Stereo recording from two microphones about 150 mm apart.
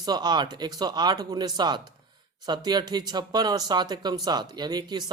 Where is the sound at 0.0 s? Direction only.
25° right (ahead or behind).